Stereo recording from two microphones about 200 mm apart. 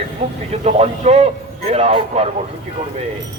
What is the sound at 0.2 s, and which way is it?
A man's voice, 25° right (ahead or behind).